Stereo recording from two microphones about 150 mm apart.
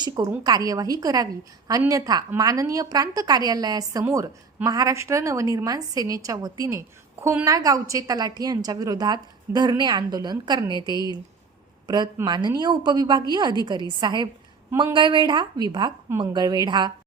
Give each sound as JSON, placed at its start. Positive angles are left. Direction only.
{"t": 0.0, "sound": "a woman's voice", "side_deg": -30}
{"t": 12.1, "sound": "a woman's voice", "side_deg": -30}